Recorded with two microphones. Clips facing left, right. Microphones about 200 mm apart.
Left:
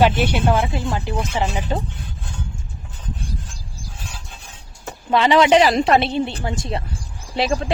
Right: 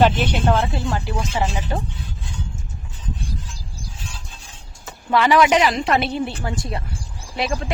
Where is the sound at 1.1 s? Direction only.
60° left (ahead or behind).